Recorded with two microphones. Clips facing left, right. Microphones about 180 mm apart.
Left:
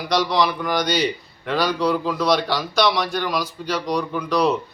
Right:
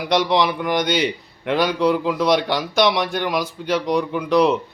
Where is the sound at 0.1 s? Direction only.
25° right (ahead or behind).